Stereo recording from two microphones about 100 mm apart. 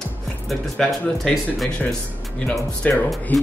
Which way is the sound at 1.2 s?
Centre (ahead or behind).